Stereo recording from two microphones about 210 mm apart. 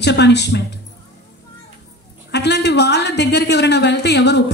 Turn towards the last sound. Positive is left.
turn(degrees=55)  # may be behind; listen again after turning